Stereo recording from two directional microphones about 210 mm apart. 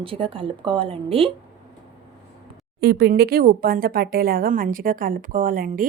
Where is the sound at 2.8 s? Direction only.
50° right (ahead or behind).